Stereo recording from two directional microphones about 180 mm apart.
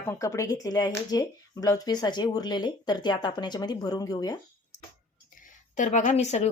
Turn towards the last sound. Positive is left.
turn(degrees=40)  # may be behind; listen again after turning